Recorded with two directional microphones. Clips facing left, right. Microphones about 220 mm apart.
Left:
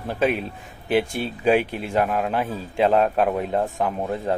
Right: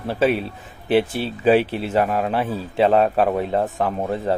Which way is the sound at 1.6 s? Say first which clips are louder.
Right 4 dB; 35° right (ahead or behind).